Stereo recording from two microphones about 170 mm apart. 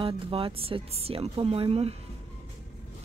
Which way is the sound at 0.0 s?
30° right (ahead or behind).